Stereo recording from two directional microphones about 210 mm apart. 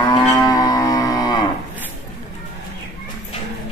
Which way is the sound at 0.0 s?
20° left (ahead or behind).